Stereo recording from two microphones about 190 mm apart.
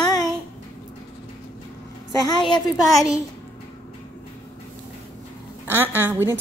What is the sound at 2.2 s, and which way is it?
Speech, 25° left (ahead or behind).